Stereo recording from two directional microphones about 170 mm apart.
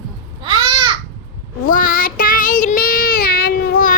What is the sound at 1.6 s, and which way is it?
Child singing, 55° left (ahead or behind).